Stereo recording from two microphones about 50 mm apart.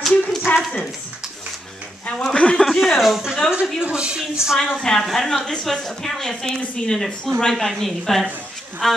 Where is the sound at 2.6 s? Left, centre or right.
Centre.